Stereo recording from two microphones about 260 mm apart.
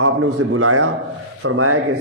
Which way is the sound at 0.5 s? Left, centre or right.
Right.